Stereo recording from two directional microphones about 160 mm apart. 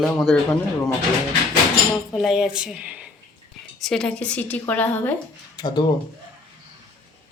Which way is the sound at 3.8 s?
5° left (ahead or behind).